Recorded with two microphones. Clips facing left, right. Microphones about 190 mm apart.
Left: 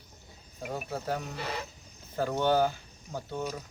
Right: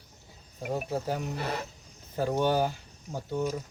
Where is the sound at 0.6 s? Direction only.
10° right (ahead or behind).